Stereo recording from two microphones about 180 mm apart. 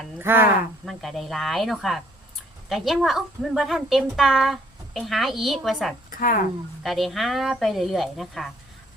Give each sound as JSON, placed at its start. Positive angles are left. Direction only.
{"t": 0.2, "sound": "speech", "side_deg": -10}
{"t": 0.9, "sound": "a woman's voice", "side_deg": 0}
{"t": 6.1, "sound": "speech", "side_deg": 50}
{"t": 6.8, "sound": "a woman's voice", "side_deg": 0}